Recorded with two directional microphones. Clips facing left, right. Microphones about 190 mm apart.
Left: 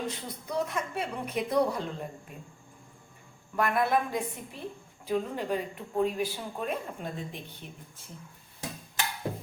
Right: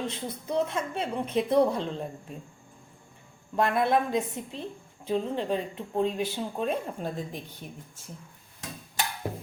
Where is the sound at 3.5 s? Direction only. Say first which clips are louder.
Right 2 dB; 25° right (ahead or behind).